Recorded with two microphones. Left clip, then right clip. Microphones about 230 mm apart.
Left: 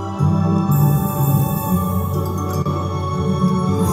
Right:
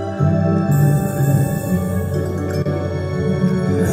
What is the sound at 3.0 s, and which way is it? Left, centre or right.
Music, left.